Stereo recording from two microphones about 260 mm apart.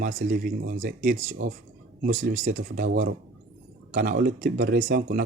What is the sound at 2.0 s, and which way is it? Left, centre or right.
Speech, right.